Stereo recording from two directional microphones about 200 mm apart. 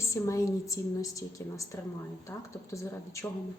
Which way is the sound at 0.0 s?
15° left (ahead or behind).